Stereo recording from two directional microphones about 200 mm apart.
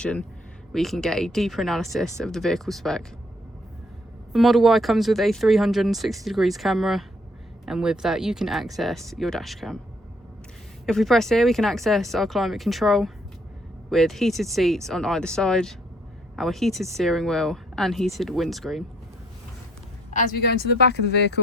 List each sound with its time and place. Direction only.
0.0 s speech: 5° left (ahead or behind)
4.3 s speech: centre (ahead or behind)
10.8 s speech: centre (ahead or behind)
20.1 s speech: 50° left (ahead or behind)